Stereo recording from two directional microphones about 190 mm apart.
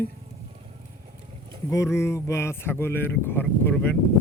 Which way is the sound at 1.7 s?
15° left (ahead or behind).